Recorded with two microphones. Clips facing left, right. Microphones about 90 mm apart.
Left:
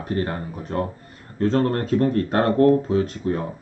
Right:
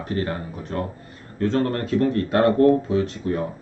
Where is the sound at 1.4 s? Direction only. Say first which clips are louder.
Left 2 dB; 40° left (ahead or behind).